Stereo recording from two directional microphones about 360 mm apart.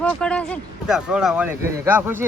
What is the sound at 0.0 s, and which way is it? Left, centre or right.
Speech, centre.